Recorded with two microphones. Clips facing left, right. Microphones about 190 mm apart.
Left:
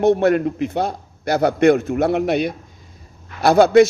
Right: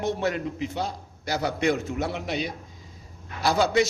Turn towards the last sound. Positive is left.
turn(degrees=55)  # may be behind; listen again after turning